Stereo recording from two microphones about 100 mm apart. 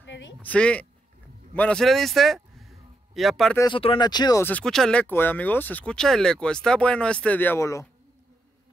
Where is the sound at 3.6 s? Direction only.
60° left (ahead or behind).